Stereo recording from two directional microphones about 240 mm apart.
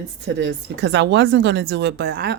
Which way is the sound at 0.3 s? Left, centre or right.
Right.